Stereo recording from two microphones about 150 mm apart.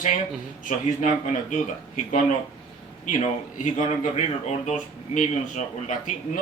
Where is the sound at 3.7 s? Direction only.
50° left (ahead or behind).